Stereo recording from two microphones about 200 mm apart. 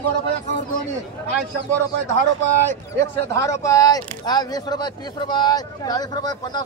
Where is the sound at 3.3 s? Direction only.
15° left (ahead or behind).